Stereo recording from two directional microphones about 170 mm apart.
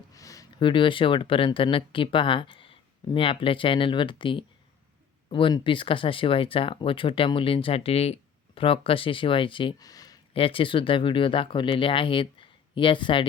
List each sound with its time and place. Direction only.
0.1 s speech: 20° left (ahead or behind)
10.3 s speech: 30° left (ahead or behind)